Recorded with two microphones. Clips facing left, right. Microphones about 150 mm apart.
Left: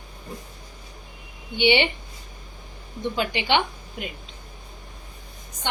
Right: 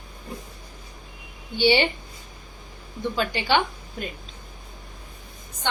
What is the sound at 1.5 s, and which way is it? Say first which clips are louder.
Speech: even; 20° left (ahead or behind).